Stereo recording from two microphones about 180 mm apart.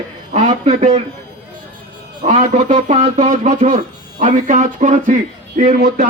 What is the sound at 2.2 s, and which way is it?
Speech, 35° right (ahead or behind).